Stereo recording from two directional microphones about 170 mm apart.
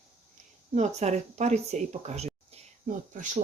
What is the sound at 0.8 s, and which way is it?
Speech, 45° right (ahead or behind).